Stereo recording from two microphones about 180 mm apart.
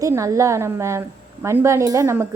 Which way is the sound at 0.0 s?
15° right (ahead or behind).